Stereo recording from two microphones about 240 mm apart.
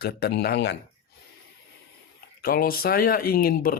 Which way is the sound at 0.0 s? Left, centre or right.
Left.